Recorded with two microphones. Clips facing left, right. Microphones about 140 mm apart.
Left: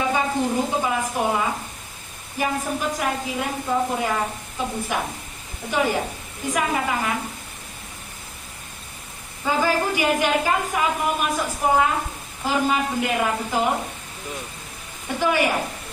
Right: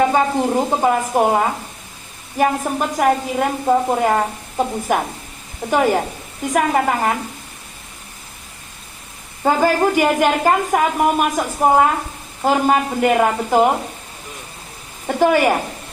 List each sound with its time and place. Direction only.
0.1 s a woman's voice: 50° right (ahead or behind)
9.4 s a woman's voice: 50° right (ahead or behind)
15.0 s a woman's voice: 50° right (ahead or behind)